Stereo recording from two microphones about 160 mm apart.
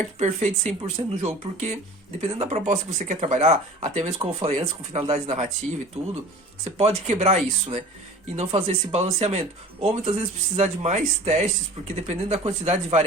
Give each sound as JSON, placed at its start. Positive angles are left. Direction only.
{"t": 0.2, "sound": "speech", "side_deg": -45}
{"t": 6.7, "sound": "speech", "side_deg": -45}